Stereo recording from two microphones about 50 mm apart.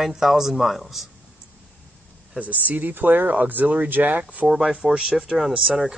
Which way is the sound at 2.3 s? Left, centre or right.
Right.